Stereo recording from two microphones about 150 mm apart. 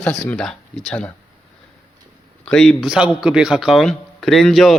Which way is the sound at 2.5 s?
Centre (ahead or behind).